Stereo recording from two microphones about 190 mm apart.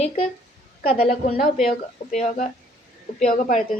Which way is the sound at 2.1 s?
40° left (ahead or behind).